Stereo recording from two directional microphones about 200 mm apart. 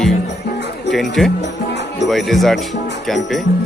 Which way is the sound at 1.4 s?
60° left (ahead or behind).